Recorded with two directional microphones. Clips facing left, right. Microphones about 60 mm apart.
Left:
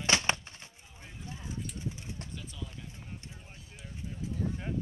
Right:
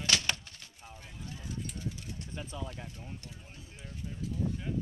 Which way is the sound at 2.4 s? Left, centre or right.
Right.